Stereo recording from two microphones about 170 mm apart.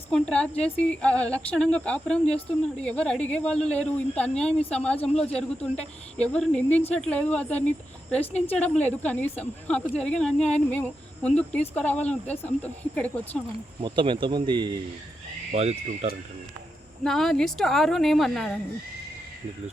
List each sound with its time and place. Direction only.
0.1 s speech: 5° left (ahead or behind)
8.2 s a woman's voice: 40° left (ahead or behind)
8.6 s speech: 10° left (ahead or behind)
13.8 s speech: 30° right (ahead or behind)
15.5 s speech: 40° right (ahead or behind)
17.0 s speech: centre (ahead or behind)